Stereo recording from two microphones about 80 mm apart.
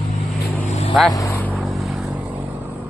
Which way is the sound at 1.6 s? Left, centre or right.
Centre.